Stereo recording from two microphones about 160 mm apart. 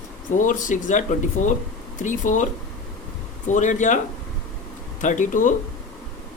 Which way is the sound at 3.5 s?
50° left (ahead or behind).